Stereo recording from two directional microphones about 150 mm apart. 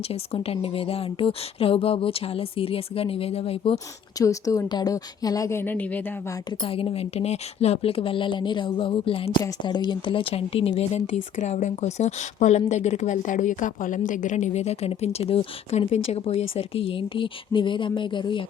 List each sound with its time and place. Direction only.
0.1 s speech: 40° left (ahead or behind)
4.2 s a woman's voice: 20° left (ahead or behind)
6.6 s speech: 35° left (ahead or behind)